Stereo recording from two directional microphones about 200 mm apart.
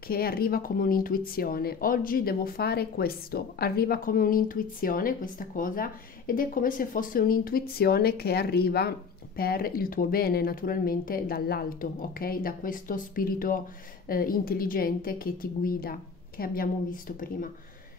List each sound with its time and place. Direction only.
0.1 s speech: 50° left (ahead or behind)